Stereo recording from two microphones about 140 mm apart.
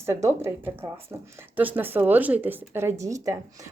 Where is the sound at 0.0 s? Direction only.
20° right (ahead or behind).